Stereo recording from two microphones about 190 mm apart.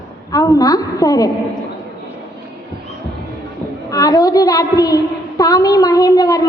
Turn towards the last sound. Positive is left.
turn(degrees=20)  # may be behind; listen again after turning